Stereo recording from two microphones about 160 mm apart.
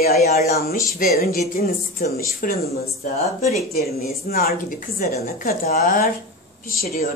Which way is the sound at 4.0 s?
70° left (ahead or behind).